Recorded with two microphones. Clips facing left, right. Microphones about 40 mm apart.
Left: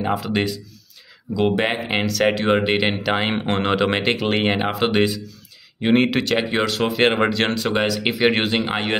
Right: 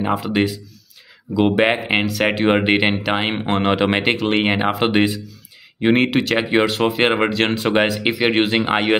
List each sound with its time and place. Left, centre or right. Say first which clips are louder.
0.0 s speech: right 3 dB; centre
1.6 s speech: right 4 dB; centre
7.5 s speech: right 3 dB; right
8.0 s speech: right 1 dB; centre